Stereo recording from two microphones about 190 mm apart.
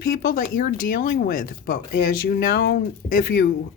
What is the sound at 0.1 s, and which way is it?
Speech, 50° left (ahead or behind).